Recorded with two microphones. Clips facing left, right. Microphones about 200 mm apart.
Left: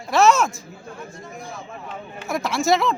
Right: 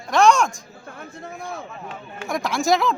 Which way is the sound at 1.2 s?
60° right (ahead or behind).